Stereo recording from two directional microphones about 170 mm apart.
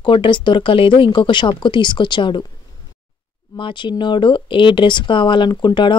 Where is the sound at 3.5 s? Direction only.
30° left (ahead or behind).